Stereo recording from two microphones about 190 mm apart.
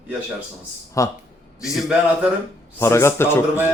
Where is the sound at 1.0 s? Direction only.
15° left (ahead or behind).